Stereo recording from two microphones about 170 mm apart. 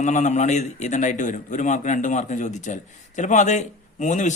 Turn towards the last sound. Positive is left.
turn(degrees=45)  # may be behind; listen again after turning